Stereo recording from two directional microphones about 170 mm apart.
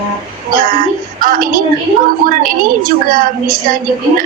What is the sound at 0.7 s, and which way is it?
A woman's voice, 60° right (ahead or behind).